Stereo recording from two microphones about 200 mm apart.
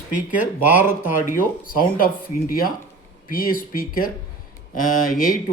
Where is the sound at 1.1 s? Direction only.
40° left (ahead or behind).